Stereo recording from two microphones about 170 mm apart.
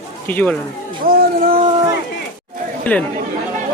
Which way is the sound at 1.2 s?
60° right (ahead or behind).